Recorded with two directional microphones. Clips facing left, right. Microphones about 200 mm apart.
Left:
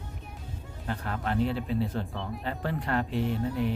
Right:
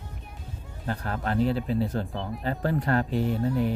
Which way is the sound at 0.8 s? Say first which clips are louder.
Right 2 dB; 40° right (ahead or behind).